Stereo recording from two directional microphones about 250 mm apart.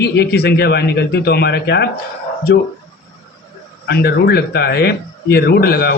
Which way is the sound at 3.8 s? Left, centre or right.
Left.